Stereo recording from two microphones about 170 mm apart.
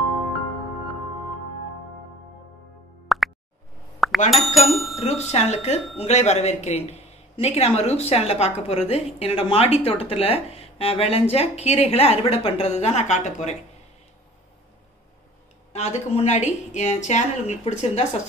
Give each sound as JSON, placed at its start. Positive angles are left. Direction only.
{"t": 3.1, "sound": "plop", "side_deg": 0}
{"t": 4.0, "sound": "chink", "side_deg": 0}
{"t": 4.6, "sound": "speech", "side_deg": 0}
{"t": 4.9, "sound": "speech", "side_deg": 40}
{"t": 15.7, "sound": "speech", "side_deg": 40}